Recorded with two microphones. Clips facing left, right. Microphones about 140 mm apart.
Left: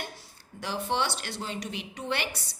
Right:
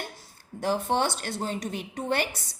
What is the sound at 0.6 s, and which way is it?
A woman's voice, 45° right (ahead or behind).